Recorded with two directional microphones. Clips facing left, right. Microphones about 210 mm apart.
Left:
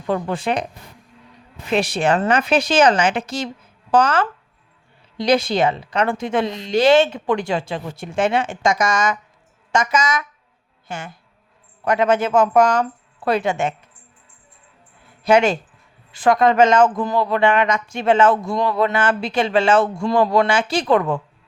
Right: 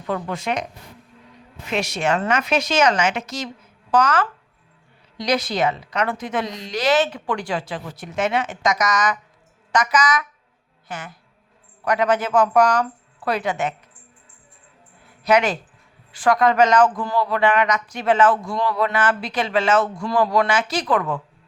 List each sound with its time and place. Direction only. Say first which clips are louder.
0.1 s a woman's voice: left 4 dB; 30° left (ahead or behind)
1.6 s a woman's voice: left 4 dB; 30° left (ahead or behind)
15.2 s speech: left 3 dB; 25° left (ahead or behind)